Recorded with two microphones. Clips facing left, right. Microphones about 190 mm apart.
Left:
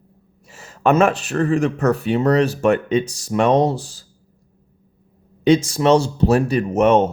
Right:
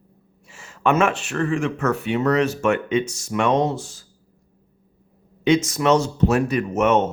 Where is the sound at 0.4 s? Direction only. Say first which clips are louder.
Left 3 dB; 40° left (ahead or behind).